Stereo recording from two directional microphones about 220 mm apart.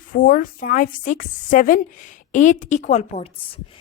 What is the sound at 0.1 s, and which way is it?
A woman's voice, 40° left (ahead or behind).